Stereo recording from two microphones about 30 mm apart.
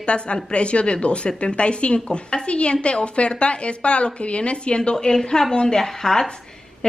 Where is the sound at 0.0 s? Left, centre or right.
Left.